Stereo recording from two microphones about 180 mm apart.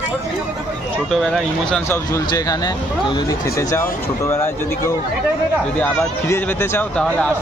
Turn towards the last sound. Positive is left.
turn(degrees=10)  # may be behind; listen again after turning